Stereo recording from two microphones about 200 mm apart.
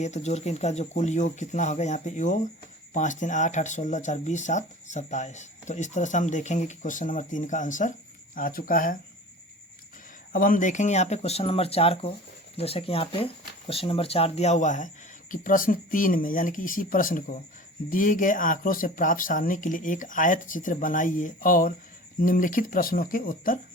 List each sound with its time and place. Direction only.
0.0 s speech: 35° left (ahead or behind)
10.3 s speech: 45° left (ahead or behind)